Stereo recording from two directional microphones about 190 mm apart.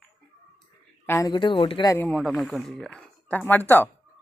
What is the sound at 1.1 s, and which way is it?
Speech, 20° left (ahead or behind).